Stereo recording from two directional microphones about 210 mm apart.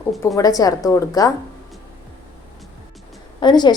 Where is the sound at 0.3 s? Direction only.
15° left (ahead or behind).